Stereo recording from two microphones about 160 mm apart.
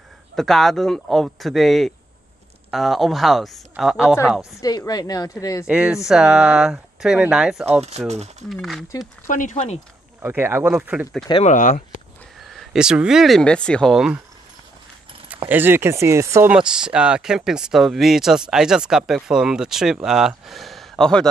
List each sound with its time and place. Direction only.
0.4 s speech: centre (ahead or behind)
4.4 s speech: 20° left (ahead or behind)
5.7 s speech: 5° right (ahead or behind)
8.1 s speech: 45° right (ahead or behind)
8.5 s speech: centre (ahead or behind)
9.3 s speech: 55° left (ahead or behind)
10.2 s speech: 15° right (ahead or behind)
11.4 s speech: 50° left (ahead or behind)
12.4 s speech: 5° right (ahead or behind)
15.2 s speech: 10° right (ahead or behind); by 21.3 s 5° left (ahead or behind)